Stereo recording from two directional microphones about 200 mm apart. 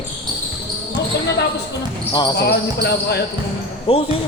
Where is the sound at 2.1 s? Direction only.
20° left (ahead or behind).